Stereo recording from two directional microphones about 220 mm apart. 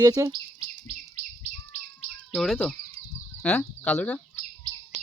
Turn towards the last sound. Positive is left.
turn(degrees=5)  # may be behind; listen again after turning